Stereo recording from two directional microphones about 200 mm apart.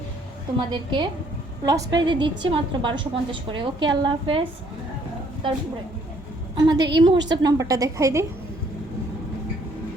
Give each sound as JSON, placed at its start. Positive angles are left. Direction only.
{"t": 0.7, "sound": "a woman's voice", "side_deg": -25}
{"t": 6.6, "sound": "a woman's voice", "side_deg": -20}